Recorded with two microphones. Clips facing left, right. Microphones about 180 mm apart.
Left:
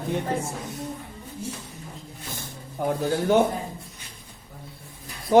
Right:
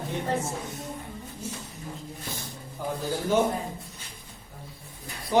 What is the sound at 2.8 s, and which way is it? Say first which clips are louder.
Speech: left 7 dB; 60° left (ahead or behind).